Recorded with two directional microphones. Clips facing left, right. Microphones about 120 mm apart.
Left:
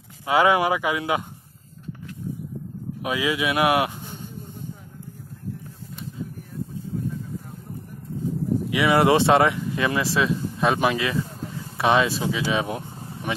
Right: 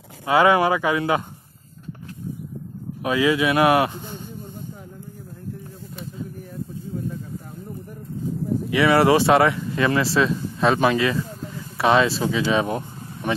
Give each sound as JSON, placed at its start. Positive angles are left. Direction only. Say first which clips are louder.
{"t": 0.2, "sound": "speech", "louder": "right 2 dB", "side_deg": 15}
{"t": 3.0, "sound": "speech", "louder": "right 5 dB", "side_deg": 10}
{"t": 8.6, "sound": "speech", "louder": "right 2 dB", "side_deg": 15}